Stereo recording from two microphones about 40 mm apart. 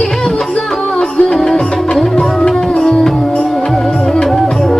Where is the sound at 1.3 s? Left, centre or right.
Centre.